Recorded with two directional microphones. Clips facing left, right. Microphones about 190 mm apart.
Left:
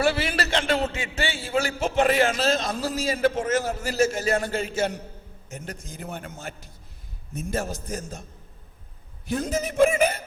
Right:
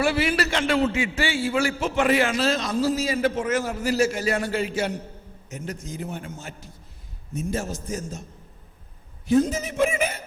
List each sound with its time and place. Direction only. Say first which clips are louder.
0.0 s a man's voice: right 2 dB; 35° left (ahead or behind)
1.5 s a man's voice: right 1 dB; 40° left (ahead or behind); by 8.2 s 55° left (ahead or behind)
9.6 s a man's voice: left 4 dB; 50° left (ahead or behind)